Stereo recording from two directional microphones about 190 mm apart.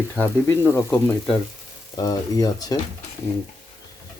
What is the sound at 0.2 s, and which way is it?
Speech, 10° left (ahead or behind).